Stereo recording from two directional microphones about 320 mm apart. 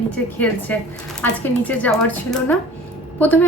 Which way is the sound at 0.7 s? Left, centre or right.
Centre.